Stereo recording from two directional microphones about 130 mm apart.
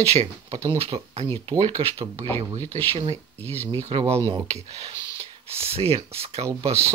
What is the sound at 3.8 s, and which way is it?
Speech, 50° right (ahead or behind).